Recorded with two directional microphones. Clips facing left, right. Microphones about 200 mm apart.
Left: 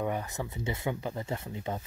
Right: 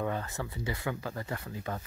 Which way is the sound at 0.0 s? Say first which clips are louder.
Left 1 dB; 15° left (ahead or behind).